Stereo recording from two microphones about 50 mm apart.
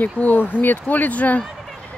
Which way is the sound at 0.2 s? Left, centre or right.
Left.